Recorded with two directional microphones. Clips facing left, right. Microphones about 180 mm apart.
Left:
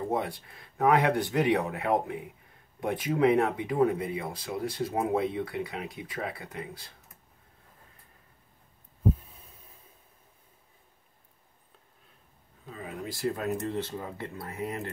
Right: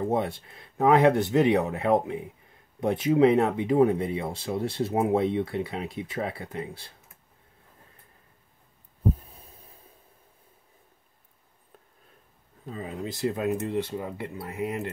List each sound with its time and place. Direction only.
0.1 s speech: 25° right (ahead or behind)
12.7 s speech: 25° right (ahead or behind)